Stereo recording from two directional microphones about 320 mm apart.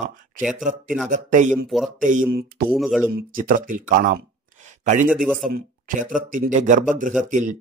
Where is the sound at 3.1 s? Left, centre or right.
Right.